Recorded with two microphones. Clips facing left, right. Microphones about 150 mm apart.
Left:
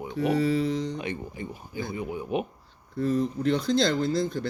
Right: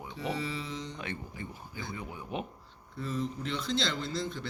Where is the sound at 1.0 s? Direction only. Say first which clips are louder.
Left 6 dB; 15° left (ahead or behind).